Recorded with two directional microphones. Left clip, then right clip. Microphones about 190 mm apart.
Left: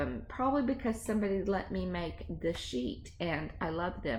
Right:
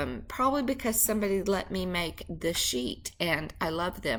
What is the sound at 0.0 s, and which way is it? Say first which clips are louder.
A woman's voice: right 5 dB; 15° right (ahead or behind).